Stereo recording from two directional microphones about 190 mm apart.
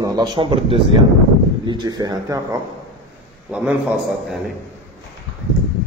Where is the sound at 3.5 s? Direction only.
5° right (ahead or behind).